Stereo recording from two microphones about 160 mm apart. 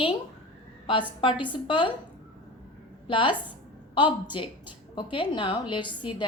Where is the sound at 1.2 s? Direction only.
30° left (ahead or behind).